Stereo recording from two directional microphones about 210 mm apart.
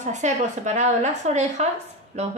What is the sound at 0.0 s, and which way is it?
A woman's voice, 35° right (ahead or behind).